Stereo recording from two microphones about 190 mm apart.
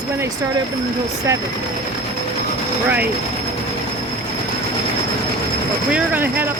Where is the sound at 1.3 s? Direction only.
15° right (ahead or behind).